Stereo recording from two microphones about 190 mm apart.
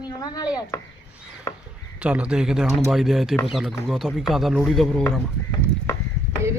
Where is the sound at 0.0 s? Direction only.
20° left (ahead or behind).